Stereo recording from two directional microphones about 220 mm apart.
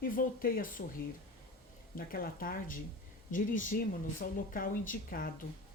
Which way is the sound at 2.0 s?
40° left (ahead or behind).